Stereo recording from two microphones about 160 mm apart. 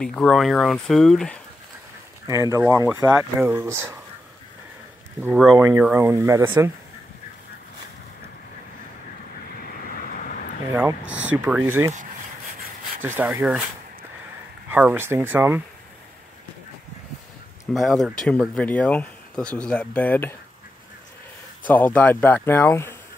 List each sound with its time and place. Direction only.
0.0 s speech: 5° left (ahead or behind)
2.2 s speech: 20° right (ahead or behind)
5.6 s speech: 15° right (ahead or behind)
9.6 s vehicle: 60° left (ahead or behind)
10.7 s speech: 15° right (ahead or behind)
13.0 s speech: 15° right (ahead or behind)
14.7 s speech: 10° right (ahead or behind)
17.7 s speech: centre (ahead or behind)
21.6 s speech: 10° left (ahead or behind)